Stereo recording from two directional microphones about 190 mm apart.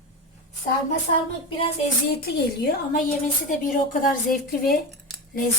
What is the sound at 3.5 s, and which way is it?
Speech, 50° left (ahead or behind).